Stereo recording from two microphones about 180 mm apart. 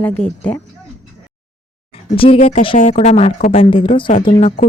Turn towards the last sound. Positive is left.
turn(degrees=35)  # may be behind; listen again after turning